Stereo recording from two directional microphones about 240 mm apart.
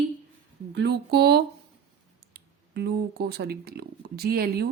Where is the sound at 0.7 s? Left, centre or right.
Right.